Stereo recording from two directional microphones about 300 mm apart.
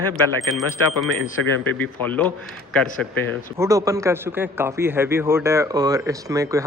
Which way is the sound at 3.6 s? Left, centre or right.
Centre.